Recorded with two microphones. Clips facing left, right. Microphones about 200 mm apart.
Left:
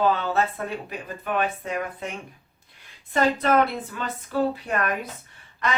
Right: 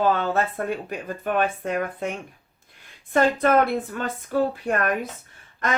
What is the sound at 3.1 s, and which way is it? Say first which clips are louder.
A woman's voice: right 2 dB; 50° right (ahead or behind).